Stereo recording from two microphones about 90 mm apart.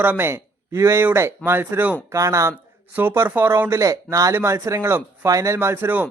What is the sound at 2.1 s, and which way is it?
Speech, 35° right (ahead or behind).